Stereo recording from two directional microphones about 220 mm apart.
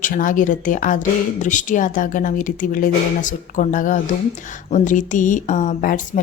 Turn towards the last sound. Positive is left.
turn(degrees=35)  # may be behind; listen again after turning